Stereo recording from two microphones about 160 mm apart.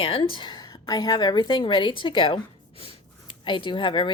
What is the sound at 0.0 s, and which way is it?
Speech, 35° left (ahead or behind).